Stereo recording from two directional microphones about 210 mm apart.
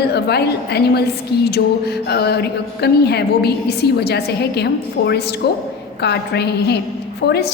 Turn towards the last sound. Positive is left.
turn(degrees=50)  # may be behind; listen again after turning